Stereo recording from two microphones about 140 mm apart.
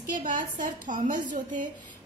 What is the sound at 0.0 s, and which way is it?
A woman's voice, 70° right (ahead or behind).